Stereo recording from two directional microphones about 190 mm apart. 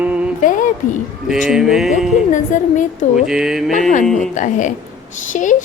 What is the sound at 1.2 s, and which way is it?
Speech, 5° right (ahead or behind).